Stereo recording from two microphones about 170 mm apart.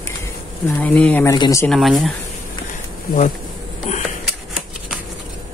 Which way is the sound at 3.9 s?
40° left (ahead or behind).